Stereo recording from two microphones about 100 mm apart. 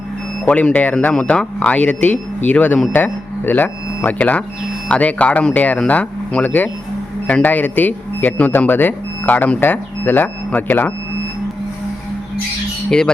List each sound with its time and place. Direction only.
0.4 s speech: 15° left (ahead or behind)